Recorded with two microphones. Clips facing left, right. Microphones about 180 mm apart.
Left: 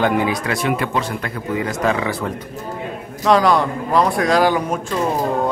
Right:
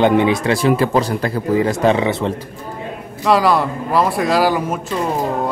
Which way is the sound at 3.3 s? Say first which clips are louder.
Even; 5° right (ahead or behind).